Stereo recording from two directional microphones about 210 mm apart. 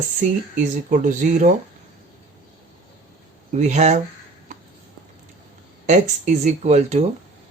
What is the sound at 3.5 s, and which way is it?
Speech, 35° right (ahead or behind).